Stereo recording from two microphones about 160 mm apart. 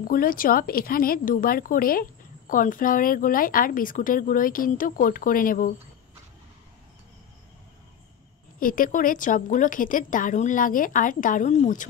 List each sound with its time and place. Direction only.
0.0 s speech: 65° left (ahead or behind)
8.5 s speech: 60° left (ahead or behind)